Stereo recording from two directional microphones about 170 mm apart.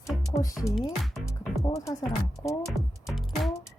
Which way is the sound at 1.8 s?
15° left (ahead or behind).